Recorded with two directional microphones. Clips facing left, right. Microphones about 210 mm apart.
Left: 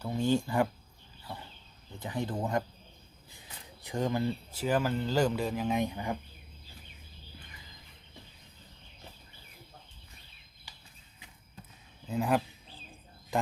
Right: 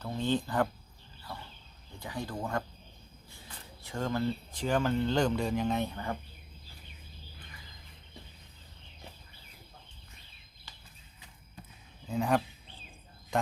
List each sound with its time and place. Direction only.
0.0 s speech: 10° left (ahead or behind)
2.0 s speech: 20° left (ahead or behind)
3.8 s speech: 15° left (ahead or behind)
10.7 s a sound: 15° left (ahead or behind)
12.0 s speech: 5° left (ahead or behind)